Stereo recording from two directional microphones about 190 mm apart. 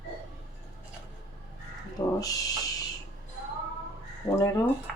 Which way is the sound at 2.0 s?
15° left (ahead or behind).